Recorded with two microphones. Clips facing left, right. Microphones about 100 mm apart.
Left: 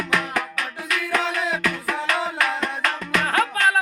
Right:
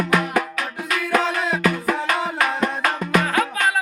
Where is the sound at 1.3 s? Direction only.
20° right (ahead or behind).